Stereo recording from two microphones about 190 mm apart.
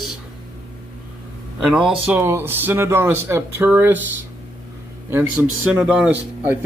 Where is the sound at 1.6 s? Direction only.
5° right (ahead or behind).